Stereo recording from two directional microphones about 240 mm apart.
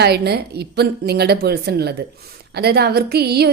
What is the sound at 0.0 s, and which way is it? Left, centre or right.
A woman's voice, right.